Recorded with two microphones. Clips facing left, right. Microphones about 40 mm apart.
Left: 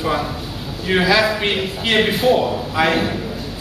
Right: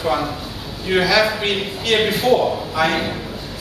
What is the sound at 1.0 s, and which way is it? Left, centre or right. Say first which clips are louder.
A man's voice: left 1 dB; centre.